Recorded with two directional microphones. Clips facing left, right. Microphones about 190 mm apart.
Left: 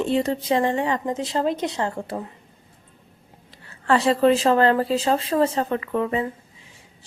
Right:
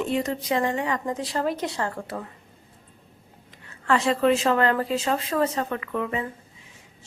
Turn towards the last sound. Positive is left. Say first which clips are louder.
# left 5 dB
turn(degrees=30)  # may be behind; listen again after turning